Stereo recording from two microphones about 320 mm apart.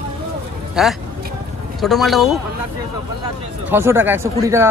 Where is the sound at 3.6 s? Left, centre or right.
Centre.